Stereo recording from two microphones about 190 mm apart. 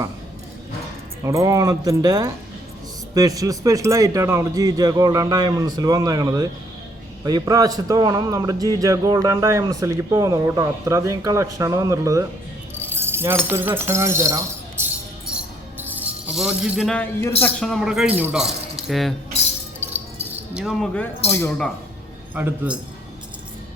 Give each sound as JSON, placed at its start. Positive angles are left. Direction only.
{"t": 1.2, "sound": "speech", "side_deg": -15}
{"t": 20.5, "sound": "speech", "side_deg": -5}
{"t": 22.4, "sound": "speech", "side_deg": -5}